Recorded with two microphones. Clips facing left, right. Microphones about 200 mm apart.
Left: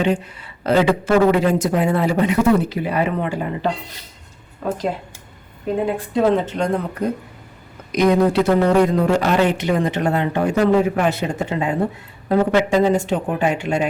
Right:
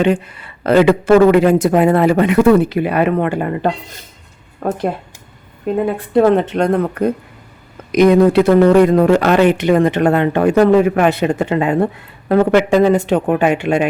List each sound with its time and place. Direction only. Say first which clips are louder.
0.0 s a woman's voice: right 5 dB; 55° right (ahead or behind)
6.0 s a woman's voice: right 7 dB; 60° right (ahead or behind)
7.9 s a woman's voice: right 6 dB; 60° right (ahead or behind)